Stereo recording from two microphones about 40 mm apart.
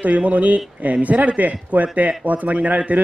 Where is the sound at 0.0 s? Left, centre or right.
Right.